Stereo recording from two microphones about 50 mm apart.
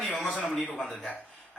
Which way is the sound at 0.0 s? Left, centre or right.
Centre.